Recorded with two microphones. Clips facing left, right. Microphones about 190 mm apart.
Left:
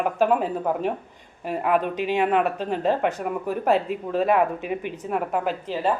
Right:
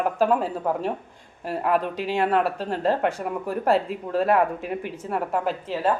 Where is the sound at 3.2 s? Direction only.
Centre (ahead or behind).